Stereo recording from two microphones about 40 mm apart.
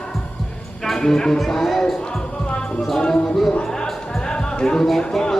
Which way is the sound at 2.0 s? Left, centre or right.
Left.